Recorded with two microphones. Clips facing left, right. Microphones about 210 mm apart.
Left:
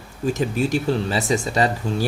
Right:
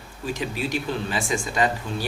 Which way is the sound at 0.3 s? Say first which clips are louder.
Left 6 dB; 45° left (ahead or behind).